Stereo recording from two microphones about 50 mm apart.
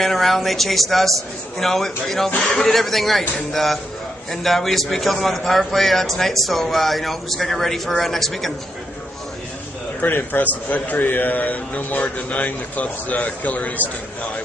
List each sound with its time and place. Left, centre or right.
0.0 s a man's voice: centre
2.3 s a man's voice: left
2.6 s a man's voice: centre
10.0 s a man's voice: left